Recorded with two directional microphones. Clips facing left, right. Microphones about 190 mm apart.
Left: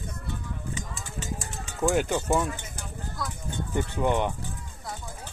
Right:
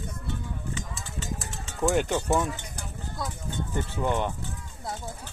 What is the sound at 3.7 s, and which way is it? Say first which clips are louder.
Speech: left 3 dB; 15° left (ahead or behind).